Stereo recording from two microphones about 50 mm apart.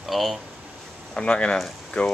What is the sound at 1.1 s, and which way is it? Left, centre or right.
Speech, left.